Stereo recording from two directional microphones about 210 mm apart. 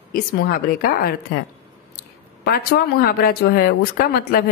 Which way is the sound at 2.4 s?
50° left (ahead or behind).